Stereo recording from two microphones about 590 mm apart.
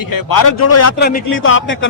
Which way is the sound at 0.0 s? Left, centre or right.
Left.